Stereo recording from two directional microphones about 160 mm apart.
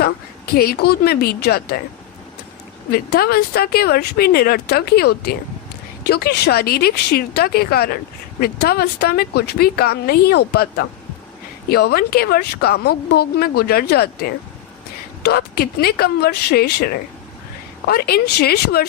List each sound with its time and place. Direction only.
0.0 s a woman's voice: 70° left (ahead or behind)
2.9 s speech: 75° left (ahead or behind)